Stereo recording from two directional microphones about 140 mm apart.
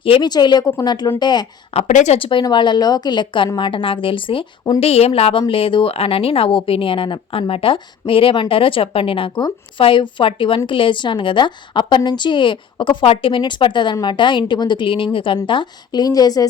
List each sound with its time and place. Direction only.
0.0 s a woman's voice: 35° left (ahead or behind)
1.9 s speech: 60° left (ahead or behind)
2.1 s a woman's voice: 40° left (ahead or behind)